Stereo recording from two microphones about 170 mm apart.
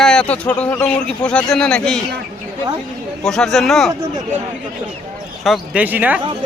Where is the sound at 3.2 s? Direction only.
5° left (ahead or behind).